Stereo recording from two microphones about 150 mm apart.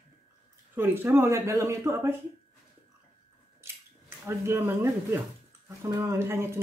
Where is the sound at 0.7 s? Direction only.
15° right (ahead or behind).